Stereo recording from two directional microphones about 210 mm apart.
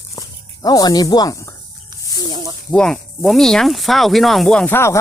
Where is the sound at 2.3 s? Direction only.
20° right (ahead or behind).